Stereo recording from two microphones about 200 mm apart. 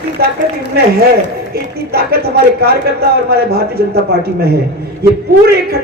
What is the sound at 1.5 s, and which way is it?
Speech, 50° right (ahead or behind).